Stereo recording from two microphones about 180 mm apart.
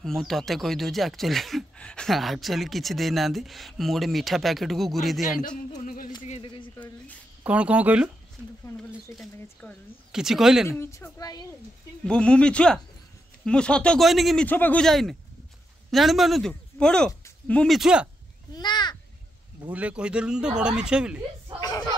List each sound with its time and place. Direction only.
0.0 s speech: centre (ahead or behind)
6.2 s a sound: 30° left (ahead or behind)
7.4 s speech: 5° right (ahead or behind)
8.4 s a sound: 10° right (ahead or behind)
8.9 s speech: centre (ahead or behind)
10.8 s a woman's voice: 15° left (ahead or behind)
12.1 s speech: 5° left (ahead or behind)
18.5 s a woman's voice: 25° left (ahead or behind)
19.7 s speech: 5° right (ahead or behind)
21.5 s a sound: 20° left (ahead or behind)